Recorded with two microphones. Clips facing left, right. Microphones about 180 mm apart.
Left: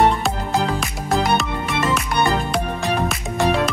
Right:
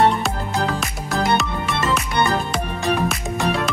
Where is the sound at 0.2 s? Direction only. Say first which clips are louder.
Left 2 dB; centre (ahead or behind).